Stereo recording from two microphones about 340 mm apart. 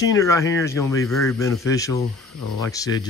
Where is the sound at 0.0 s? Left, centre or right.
Centre.